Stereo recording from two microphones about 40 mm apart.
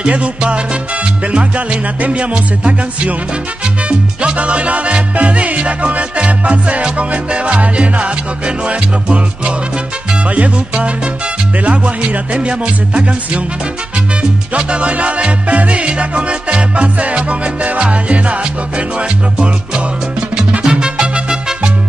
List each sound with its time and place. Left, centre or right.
0.1 s music: right
4.2 s music: right
14.6 s music: right